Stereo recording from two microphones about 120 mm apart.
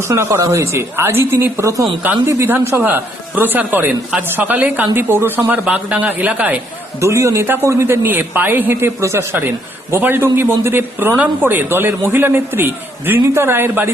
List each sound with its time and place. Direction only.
0.0 s a man's voice: 20° right (ahead or behind)
7.0 s a man's voice: 25° right (ahead or behind)